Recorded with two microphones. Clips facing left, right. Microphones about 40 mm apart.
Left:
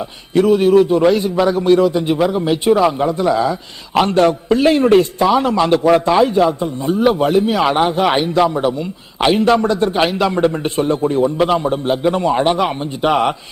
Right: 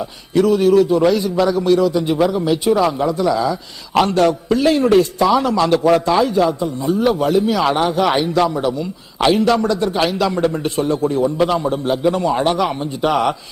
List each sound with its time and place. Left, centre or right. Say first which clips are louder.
0.0 s a man's voice: left 1 dB; left
2.1 s speech: even; centre
2.4 s a man's voice: left 2 dB; left
5.2 s a man's voice: left 1 dB; centre